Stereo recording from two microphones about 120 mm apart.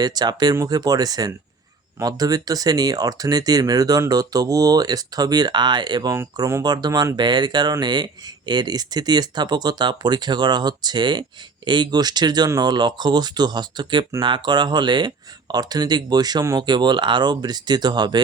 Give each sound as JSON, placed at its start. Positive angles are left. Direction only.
{"t": 0.0, "sound": "speech", "side_deg": -35}